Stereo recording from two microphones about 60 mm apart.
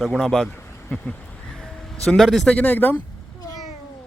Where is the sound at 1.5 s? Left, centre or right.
Centre.